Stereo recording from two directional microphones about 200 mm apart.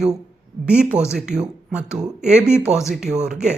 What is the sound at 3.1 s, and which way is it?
Speech, 35° right (ahead or behind).